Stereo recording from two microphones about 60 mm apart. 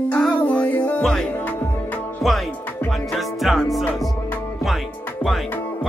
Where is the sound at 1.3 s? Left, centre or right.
Left.